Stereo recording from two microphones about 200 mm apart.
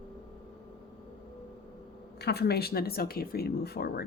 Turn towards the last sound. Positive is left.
turn(degrees=55)  # may be behind; listen again after turning